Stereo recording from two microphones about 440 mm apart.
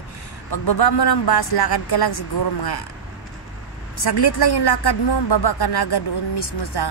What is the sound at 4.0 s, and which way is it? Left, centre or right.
A woman's voice, left.